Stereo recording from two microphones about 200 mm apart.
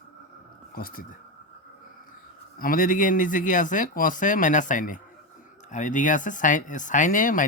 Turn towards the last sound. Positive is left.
turn(degrees=40)  # may be behind; listen again after turning